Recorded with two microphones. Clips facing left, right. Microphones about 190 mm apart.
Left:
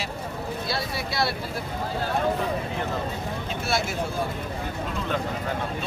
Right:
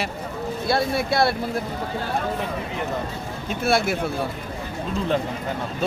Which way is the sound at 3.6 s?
55° right (ahead or behind).